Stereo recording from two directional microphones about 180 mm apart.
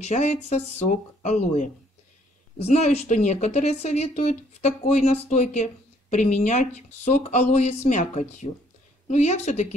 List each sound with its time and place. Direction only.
0.0 s speech: 40° left (ahead or behind)